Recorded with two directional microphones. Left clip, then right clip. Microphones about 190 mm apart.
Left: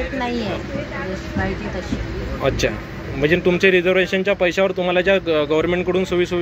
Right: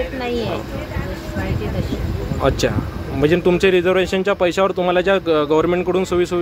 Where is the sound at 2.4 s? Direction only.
25° right (ahead or behind).